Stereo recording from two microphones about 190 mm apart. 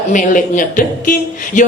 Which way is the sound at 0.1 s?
45° left (ahead or behind).